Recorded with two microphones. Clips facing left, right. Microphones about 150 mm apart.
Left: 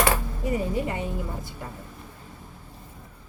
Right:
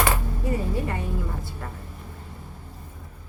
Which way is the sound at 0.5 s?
20° left (ahead or behind).